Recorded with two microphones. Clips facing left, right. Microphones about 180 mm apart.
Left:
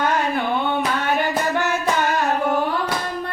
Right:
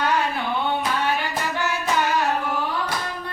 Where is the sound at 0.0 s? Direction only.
50° left (ahead or behind).